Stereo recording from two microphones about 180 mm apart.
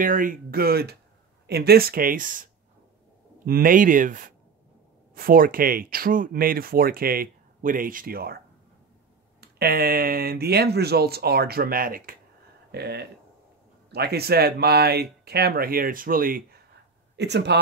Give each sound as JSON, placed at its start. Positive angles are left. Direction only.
{"t": 0.0, "sound": "speech", "side_deg": -50}
{"t": 9.4, "sound": "speech", "side_deg": -60}
{"t": 12.7, "sound": "speech", "side_deg": -65}
{"t": 17.2, "sound": "speech", "side_deg": -70}